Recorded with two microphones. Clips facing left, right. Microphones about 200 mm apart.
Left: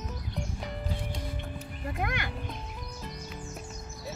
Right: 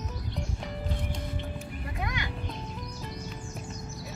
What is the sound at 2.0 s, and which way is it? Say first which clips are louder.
Music: left 2 dB; 60° left (ahead or behind).